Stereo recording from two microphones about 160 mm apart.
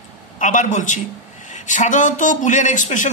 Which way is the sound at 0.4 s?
50° left (ahead or behind).